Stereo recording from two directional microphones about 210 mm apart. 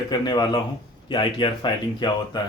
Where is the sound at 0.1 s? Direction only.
20° left (ahead or behind).